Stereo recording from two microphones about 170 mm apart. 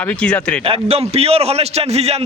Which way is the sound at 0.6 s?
35° right (ahead or behind).